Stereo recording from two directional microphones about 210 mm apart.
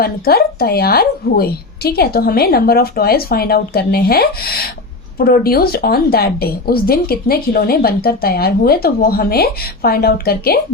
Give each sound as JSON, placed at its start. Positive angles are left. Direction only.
{"t": 0.0, "sound": "a woman's voice", "side_deg": 45}